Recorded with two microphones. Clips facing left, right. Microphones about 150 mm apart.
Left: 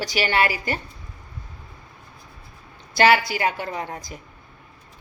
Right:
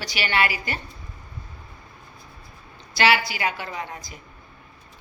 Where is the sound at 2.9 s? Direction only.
45° left (ahead or behind).